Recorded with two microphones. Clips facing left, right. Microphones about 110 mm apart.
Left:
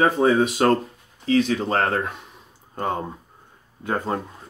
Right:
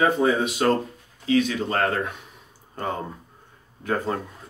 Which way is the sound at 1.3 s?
30° left (ahead or behind).